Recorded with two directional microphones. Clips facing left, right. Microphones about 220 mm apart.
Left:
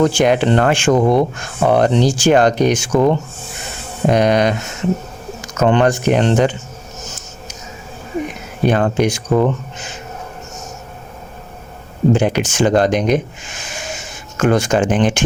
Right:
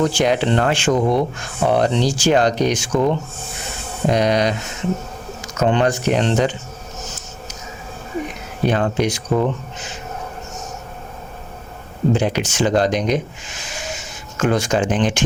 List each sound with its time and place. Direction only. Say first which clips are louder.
0.0 s speech: left 4 dB; 50° left (ahead or behind)
5.5 s speech: left 3 dB; 55° left (ahead or behind)
8.6 s speech: left 3 dB; 50° left (ahead or behind)
12.1 s speech: left 3 dB; 50° left (ahead or behind)
13.7 s a sound: left 1 dB; 50° left (ahead or behind)